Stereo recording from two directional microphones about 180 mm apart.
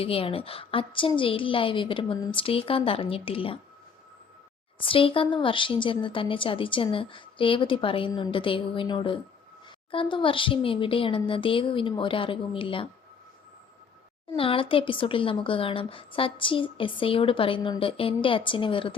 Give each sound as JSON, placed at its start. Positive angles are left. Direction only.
{"t": 0.0, "sound": "a woman's voice", "side_deg": 30}
{"t": 4.8, "sound": "speech", "side_deg": 30}
{"t": 14.3, "sound": "speech", "side_deg": 30}